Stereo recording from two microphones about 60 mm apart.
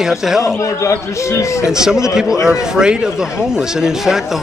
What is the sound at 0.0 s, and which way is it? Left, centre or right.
Speech, centre.